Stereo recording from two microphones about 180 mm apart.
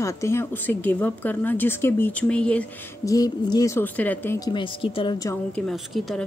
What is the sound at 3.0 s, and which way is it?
Speech, 20° left (ahead or behind).